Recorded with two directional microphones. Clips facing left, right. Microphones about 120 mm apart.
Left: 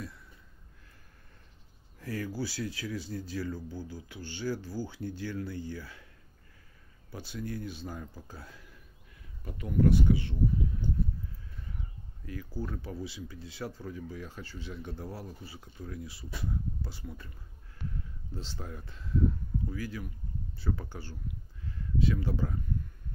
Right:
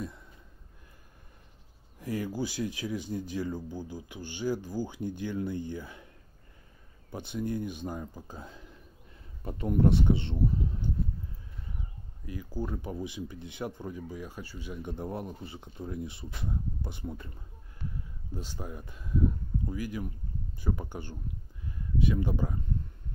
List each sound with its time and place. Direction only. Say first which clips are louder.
2.0 s speech: right 3 dB; 15° right (ahead or behind)
7.1 s speech: right 5 dB; 20° right (ahead or behind)
9.4 s speech: right 2 dB; 35° right (ahead or behind)
12.3 s speech: right 3 dB; 15° right (ahead or behind)
18.3 s speech: right 3 dB; 15° right (ahead or behind)